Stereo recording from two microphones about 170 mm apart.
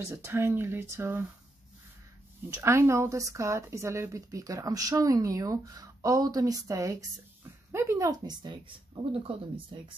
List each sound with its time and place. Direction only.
0.1 s speech: 15° right (ahead or behind)
2.5 s speech: 15° right (ahead or behind)